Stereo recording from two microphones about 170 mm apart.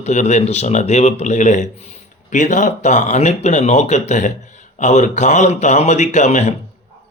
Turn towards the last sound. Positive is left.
turn(degrees=40)  # may be behind; listen again after turning